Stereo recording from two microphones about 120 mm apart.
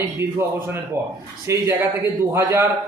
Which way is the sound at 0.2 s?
20° right (ahead or behind).